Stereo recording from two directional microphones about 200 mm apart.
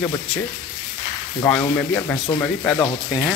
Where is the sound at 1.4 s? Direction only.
10° left (ahead or behind).